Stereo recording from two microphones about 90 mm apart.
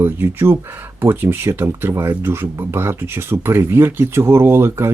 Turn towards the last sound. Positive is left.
turn(degrees=-30)  # may be behind; listen again after turning